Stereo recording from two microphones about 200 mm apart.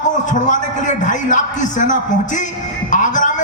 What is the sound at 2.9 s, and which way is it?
Music, 40° left (ahead or behind).